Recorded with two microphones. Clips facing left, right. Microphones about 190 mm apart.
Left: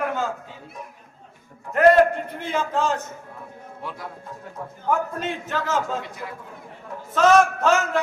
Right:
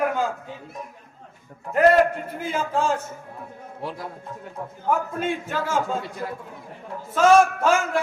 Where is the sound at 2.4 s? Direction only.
5° right (ahead or behind).